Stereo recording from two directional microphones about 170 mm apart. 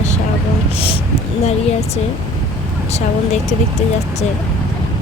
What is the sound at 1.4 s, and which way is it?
Speech, 40° left (ahead or behind).